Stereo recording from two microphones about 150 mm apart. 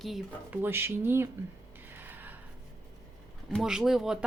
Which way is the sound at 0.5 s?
15° right (ahead or behind).